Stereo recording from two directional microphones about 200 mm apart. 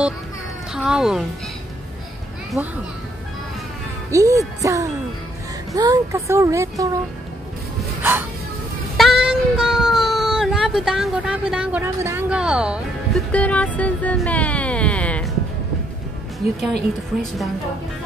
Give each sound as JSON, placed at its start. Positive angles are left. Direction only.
{"t": 0.7, "sound": "speech", "side_deg": -5}
{"t": 2.6, "sound": "speech", "side_deg": -5}
{"t": 4.1, "sound": "speech", "side_deg": -15}
{"t": 8.0, "sound": "speech", "side_deg": -10}
{"t": 8.9, "sound": "child singing", "side_deg": 0}
{"t": 13.3, "sound": "speech", "side_deg": 5}